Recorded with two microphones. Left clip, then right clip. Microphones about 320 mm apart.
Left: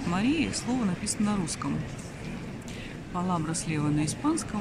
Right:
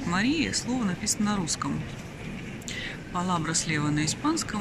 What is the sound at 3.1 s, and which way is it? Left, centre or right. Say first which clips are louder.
Speech: right 2 dB; centre.